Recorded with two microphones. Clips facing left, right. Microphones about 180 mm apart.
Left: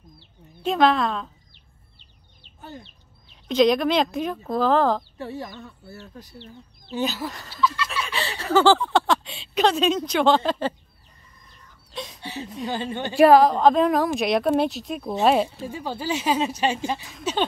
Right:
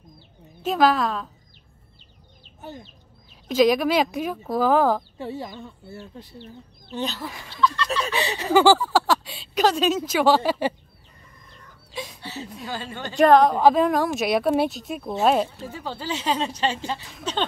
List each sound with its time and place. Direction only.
0.7 s speech: centre (ahead or behind)
3.4 s speech: 5° right (ahead or behind)
5.2 s speech: 25° right (ahead or behind)
6.9 s speech: 5° left (ahead or behind)
8.1 s speech: 15° right (ahead or behind)
11.9 s a sound: 5° right (ahead or behind)
12.2 s a woman's voice: 15° left (ahead or behind)
13.2 s speech: 5° left (ahead or behind)